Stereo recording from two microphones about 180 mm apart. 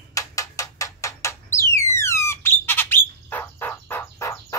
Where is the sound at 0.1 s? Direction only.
20° left (ahead or behind).